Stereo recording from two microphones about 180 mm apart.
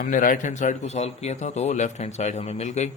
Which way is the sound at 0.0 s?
50° left (ahead or behind).